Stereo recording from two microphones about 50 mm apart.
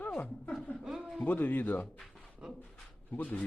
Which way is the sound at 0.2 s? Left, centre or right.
Left.